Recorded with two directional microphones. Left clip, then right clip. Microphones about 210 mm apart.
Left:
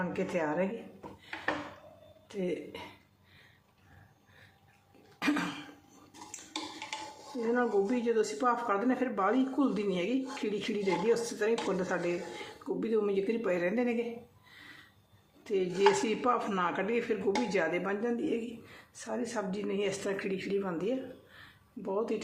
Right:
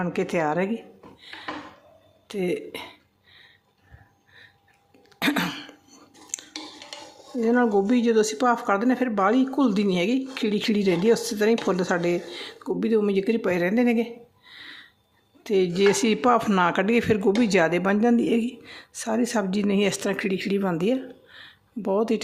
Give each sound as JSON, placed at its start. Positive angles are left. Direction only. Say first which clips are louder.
{"t": 0.0, "sound": "a woman's voice", "louder": "right 8 dB", "side_deg": -55}
{"t": 2.2, "sound": "speech", "louder": "right 8 dB", "side_deg": -55}
{"t": 5.2, "sound": "a sound", "louder": "right 7 dB", "side_deg": -40}
{"t": 7.4, "sound": "speech", "louder": "right 8 dB", "side_deg": -50}
{"t": 15.4, "sound": "speech", "louder": "right 7 dB", "side_deg": -50}